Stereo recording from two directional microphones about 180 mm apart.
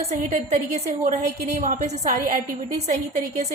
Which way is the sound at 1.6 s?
40° right (ahead or behind).